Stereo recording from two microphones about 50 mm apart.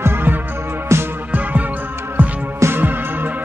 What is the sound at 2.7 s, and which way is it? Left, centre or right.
Music, right.